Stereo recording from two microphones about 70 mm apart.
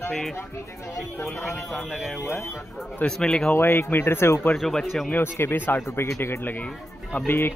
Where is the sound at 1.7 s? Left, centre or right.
Centre.